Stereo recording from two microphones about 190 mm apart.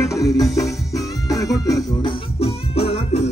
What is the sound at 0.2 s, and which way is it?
Music, 15° left (ahead or behind).